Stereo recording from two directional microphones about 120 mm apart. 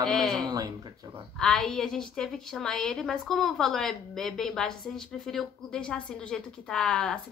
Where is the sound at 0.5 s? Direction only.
30° right (ahead or behind).